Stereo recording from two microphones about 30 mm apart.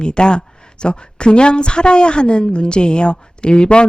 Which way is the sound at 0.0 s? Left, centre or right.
Left.